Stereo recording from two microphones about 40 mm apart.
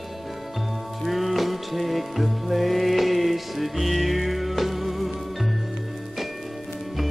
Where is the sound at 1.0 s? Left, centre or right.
Centre.